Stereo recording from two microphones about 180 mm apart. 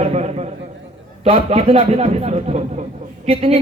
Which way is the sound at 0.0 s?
35° right (ahead or behind).